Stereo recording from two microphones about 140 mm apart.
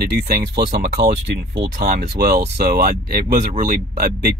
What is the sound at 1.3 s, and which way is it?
Speech, 90° right.